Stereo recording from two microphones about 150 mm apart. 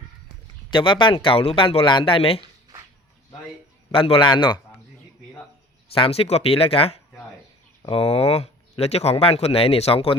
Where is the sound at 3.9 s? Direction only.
35° left (ahead or behind).